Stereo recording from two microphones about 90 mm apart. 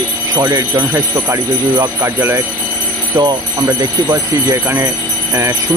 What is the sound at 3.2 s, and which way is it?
Speech, 45° right (ahead or behind).